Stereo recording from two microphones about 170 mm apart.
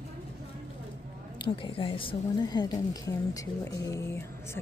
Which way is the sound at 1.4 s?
30° left (ahead or behind).